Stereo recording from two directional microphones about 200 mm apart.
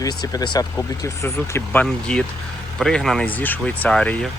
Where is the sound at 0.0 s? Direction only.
20° left (ahead or behind).